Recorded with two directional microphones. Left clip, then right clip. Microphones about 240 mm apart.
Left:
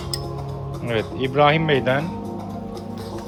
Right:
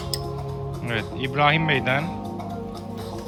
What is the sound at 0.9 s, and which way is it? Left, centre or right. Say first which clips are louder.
Speech: left 5 dB; right.